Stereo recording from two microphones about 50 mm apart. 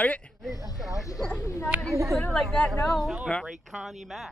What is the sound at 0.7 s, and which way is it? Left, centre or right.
Speech, centre.